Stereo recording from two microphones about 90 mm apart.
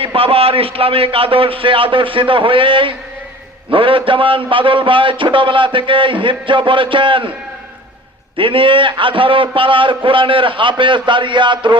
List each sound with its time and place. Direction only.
0.0 s a man's voice: 90° right; by 7.3 s 70° right (ahead or behind)
8.4 s a man's voice: 70° right (ahead or behind)